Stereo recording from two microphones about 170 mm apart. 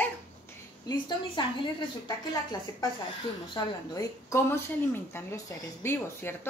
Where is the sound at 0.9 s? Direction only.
25° left (ahead or behind).